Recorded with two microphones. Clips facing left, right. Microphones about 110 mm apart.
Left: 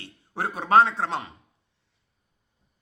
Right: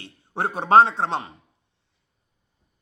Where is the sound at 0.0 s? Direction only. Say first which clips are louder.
Right 3 dB; 30° right (ahead or behind).